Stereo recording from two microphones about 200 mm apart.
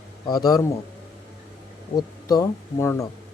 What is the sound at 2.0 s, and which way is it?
Speech, 15° left (ahead or behind).